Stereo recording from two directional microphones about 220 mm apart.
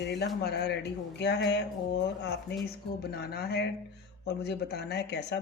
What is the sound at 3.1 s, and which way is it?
Speech, 45° left (ahead or behind).